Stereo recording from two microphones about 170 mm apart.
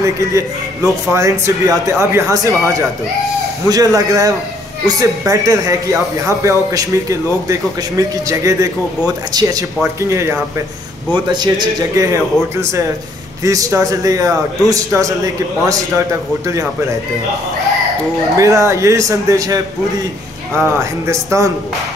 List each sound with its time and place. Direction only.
0.0 s a man's voice: 20° right (ahead or behind)
18.4 s a man's voice: 20° right (ahead or behind)